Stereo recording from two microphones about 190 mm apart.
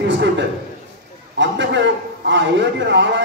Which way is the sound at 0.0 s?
70° right (ahead or behind).